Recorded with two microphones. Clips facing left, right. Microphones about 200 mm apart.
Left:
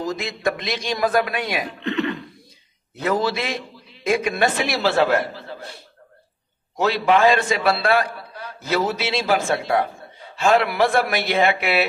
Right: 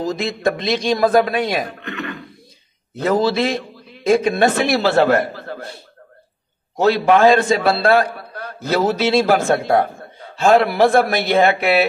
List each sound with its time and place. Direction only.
0.0 s a man's voice: 30° right (ahead or behind)
1.5 s a man's voice: 40° right (ahead or behind)
1.9 s cough: 25° left (ahead or behind)
3.1 s a man's voice: 30° right (ahead or behind)
4.6 s a man's voice: 50° right (ahead or behind)
6.8 s a man's voice: 45° right (ahead or behind)